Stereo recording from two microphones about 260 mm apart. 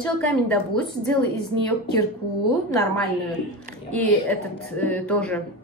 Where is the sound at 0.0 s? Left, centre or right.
Centre.